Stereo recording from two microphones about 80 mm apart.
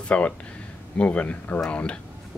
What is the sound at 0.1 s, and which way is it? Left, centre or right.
Speech, centre.